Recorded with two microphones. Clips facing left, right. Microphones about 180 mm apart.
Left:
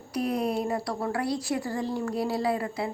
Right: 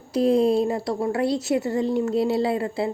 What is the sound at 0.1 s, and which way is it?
A woman's voice, 25° right (ahead or behind).